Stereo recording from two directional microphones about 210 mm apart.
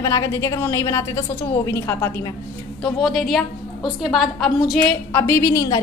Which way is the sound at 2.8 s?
Centre (ahead or behind).